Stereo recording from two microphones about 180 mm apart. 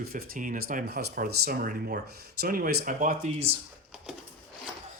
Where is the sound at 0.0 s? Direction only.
55° right (ahead or behind).